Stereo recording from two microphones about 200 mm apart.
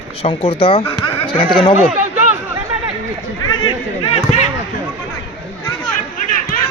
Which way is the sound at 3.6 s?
25° left (ahead or behind).